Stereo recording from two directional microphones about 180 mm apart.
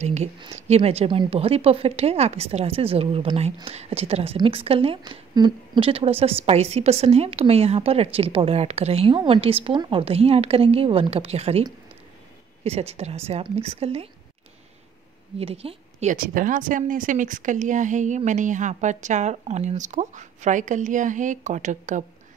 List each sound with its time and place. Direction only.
0.0 s a woman's voice: 40° right (ahead or behind)
12.6 s a woman's voice: 35° right (ahead or behind)
15.3 s a woman's voice: 35° right (ahead or behind)